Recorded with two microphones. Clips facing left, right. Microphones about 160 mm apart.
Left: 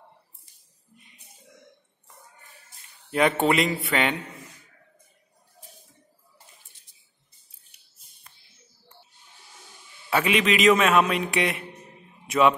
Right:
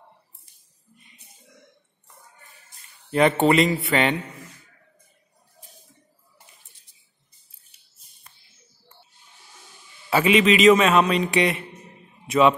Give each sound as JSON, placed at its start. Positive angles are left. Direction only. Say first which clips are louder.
{"t": 3.1, "sound": "a man's voice", "louder": "right 3 dB", "side_deg": 0}
{"t": 10.0, "sound": "a man's voice", "louder": "right 5 dB", "side_deg": 0}